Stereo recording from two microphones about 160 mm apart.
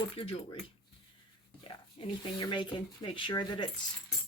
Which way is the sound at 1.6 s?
30° left (ahead or behind).